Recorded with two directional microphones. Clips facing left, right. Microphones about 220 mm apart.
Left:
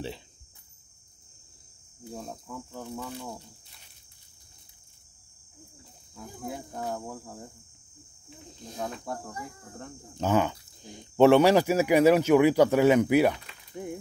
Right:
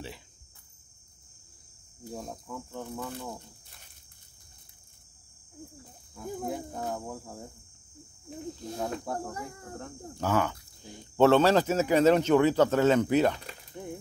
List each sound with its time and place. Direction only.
2.1 s speech: centre (ahead or behind)
6.1 s speech: centre (ahead or behind)
8.3 s cricket: 40° right (ahead or behind)
8.7 s speech: centre (ahead or behind)
10.1 s speech: 20° left (ahead or behind)